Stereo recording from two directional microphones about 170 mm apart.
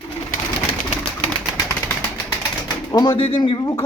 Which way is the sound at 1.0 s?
30° left (ahead or behind).